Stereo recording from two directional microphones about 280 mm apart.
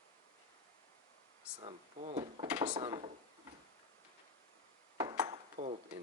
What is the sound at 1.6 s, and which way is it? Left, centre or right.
Speech, right.